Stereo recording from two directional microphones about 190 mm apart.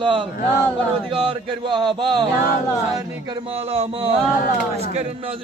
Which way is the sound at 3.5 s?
30° right (ahead or behind).